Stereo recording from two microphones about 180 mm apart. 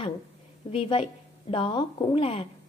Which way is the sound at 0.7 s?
30° left (ahead or behind).